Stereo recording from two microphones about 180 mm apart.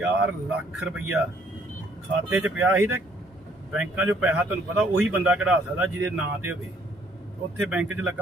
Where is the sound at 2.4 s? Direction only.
10° right (ahead or behind).